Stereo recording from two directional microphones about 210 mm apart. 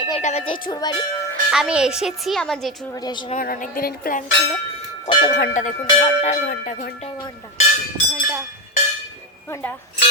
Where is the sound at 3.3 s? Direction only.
40° left (ahead or behind).